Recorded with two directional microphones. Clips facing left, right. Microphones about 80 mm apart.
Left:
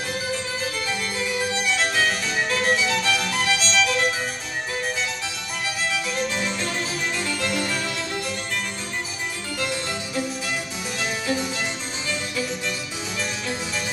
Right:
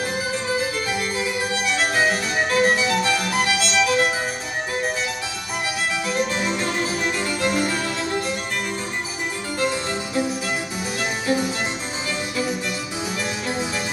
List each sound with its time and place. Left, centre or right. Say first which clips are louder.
0.1 s harpsichord: right 4 dB; right
1.8 s music: right 5 dB; centre
5.9 s harpsichord: right 3 dB; centre
11.0 s harpsichord: right 3 dB; centre